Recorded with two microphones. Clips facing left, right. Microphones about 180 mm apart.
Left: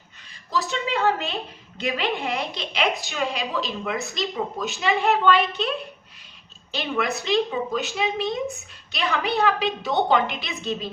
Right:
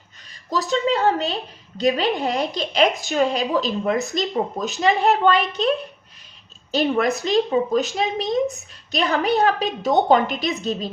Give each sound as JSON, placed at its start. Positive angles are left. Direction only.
{"t": 0.5, "sound": "a woman's voice", "side_deg": -40}